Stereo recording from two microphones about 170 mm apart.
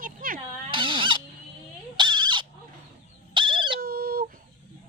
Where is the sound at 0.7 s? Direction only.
30° right (ahead or behind).